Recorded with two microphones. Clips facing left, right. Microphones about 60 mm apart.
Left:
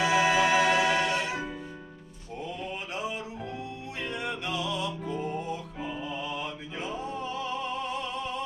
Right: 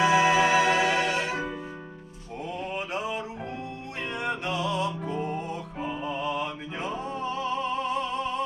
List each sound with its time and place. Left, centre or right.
0.0 s music: right
2.6 s a sound: right
4.2 s music: right